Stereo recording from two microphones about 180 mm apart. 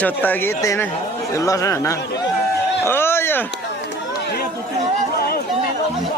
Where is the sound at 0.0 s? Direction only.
10° left (ahead or behind).